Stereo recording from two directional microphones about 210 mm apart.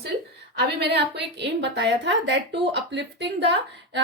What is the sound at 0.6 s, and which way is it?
A woman's voice, 50° right (ahead or behind).